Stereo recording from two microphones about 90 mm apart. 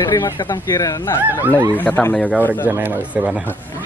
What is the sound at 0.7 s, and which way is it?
Speech, 40° left (ahead or behind).